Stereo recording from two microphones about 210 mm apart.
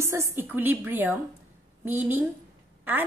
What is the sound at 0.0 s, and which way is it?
A woman's voice, 15° right (ahead or behind).